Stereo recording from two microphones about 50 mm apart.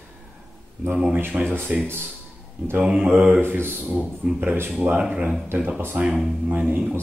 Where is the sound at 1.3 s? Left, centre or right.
Right.